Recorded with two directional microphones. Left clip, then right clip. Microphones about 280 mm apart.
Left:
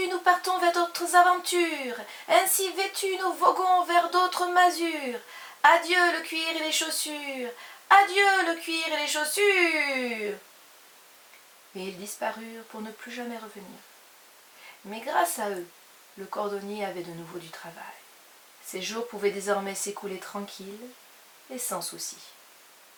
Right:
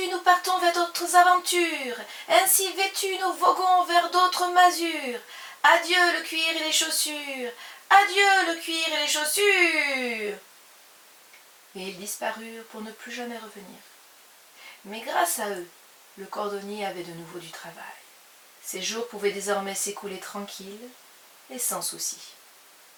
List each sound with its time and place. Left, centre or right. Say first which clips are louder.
0.0 s a woman's voice: right 2 dB; centre
12.2 s speech: right 1 dB; centre
14.8 s speech: right 1 dB; centre
19.2 s a woman's voice: even; centre
21.5 s a woman's voice: right 2 dB; centre